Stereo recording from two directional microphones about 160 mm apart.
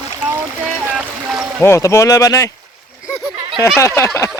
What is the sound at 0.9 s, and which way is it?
Speech, 10° right (ahead or behind).